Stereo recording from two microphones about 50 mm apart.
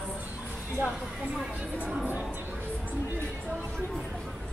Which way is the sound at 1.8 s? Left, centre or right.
Right.